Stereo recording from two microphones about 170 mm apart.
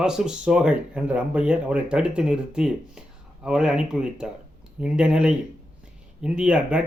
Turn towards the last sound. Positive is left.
turn(degrees=-5)  # may be behind; listen again after turning